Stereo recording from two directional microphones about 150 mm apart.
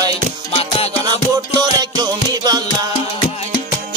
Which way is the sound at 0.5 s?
40° left (ahead or behind).